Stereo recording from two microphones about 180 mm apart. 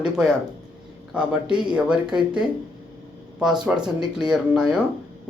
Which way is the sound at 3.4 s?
5° right (ahead or behind).